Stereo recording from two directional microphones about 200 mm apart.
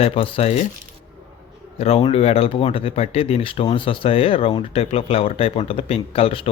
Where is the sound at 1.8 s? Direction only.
30° left (ahead or behind).